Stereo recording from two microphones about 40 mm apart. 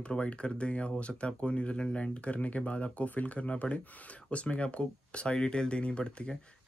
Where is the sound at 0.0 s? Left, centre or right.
Left.